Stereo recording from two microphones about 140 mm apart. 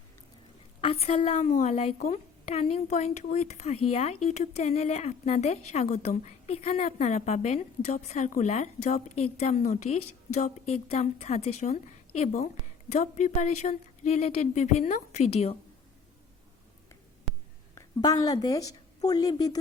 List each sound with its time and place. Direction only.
0.8 s a woman's voice: 45° left (ahead or behind)
17.7 s a woman's voice: 25° left (ahead or behind)